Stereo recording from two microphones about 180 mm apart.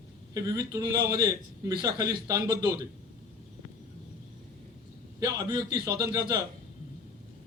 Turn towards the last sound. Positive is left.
turn(degrees=-20)  # may be behind; listen again after turning